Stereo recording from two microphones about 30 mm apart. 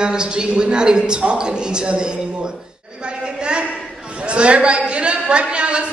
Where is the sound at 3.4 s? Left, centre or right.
Right.